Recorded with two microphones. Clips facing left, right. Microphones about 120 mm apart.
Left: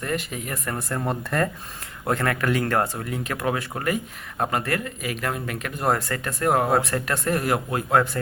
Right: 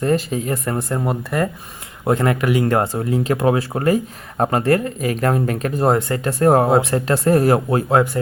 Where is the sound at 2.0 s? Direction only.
20° right (ahead or behind).